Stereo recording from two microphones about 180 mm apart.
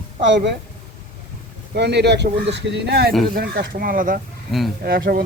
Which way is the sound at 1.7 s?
70° right (ahead or behind).